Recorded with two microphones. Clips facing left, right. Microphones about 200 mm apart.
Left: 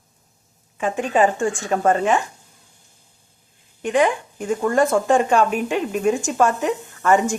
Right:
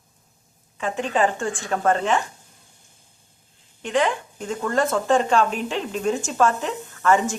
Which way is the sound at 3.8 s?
15° left (ahead or behind).